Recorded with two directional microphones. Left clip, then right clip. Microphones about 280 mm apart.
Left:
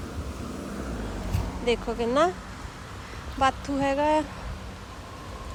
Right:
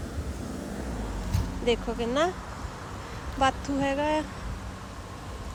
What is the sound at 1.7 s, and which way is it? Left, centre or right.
Speech, centre.